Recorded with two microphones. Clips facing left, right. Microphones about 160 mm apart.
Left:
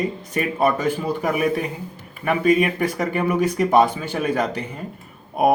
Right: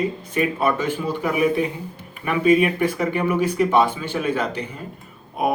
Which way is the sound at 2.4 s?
45° left (ahead or behind).